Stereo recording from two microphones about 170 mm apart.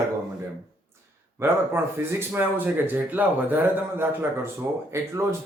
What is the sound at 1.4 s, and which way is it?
Speech, 15° right (ahead or behind).